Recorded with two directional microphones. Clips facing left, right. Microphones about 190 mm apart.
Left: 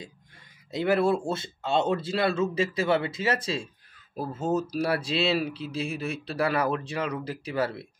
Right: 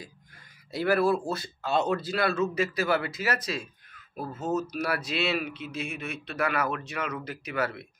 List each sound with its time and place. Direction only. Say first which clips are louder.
0.7 s speech: left 1 dB; 20° left (ahead or behind)